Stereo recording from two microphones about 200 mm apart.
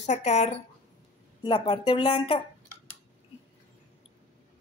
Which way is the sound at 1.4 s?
20° left (ahead or behind).